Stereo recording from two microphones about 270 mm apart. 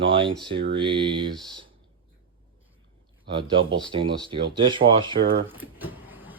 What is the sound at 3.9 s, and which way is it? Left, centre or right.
Speech, centre.